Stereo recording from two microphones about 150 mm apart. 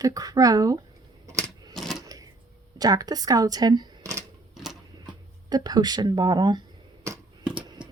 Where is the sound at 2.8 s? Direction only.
25° right (ahead or behind).